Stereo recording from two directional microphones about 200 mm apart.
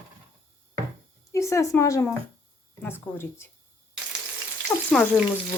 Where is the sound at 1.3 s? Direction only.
15° left (ahead or behind).